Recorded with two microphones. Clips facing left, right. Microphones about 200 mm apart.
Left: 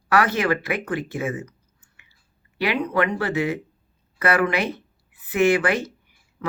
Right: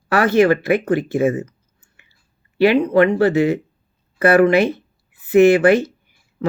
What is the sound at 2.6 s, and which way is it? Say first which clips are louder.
Speech: right 9 dB; 25° right (ahead or behind).